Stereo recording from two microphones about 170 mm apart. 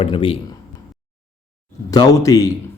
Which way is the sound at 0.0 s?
30° left (ahead or behind).